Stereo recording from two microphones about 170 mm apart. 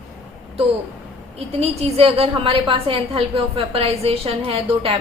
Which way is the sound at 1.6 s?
40° right (ahead or behind).